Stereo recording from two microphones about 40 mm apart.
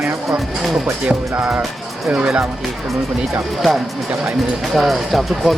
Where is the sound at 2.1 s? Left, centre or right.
Right.